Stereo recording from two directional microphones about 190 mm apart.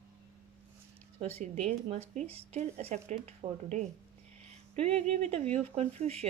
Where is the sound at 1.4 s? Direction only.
35° right (ahead or behind).